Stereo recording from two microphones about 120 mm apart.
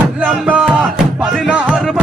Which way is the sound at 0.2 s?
10° right (ahead or behind).